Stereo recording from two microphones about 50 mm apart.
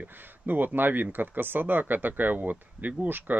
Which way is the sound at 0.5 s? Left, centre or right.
Right.